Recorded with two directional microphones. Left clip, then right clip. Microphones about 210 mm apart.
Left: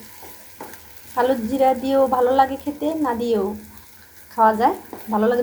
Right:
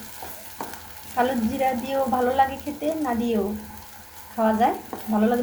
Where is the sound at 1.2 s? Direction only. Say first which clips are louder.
Left 5 dB; 30° left (ahead or behind).